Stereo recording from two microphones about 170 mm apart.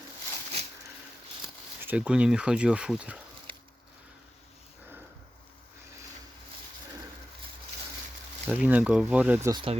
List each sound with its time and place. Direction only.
1.8 s speech: 10° right (ahead or behind)
8.4 s speech: 5° right (ahead or behind)
9.5 s speech: 30° right (ahead or behind)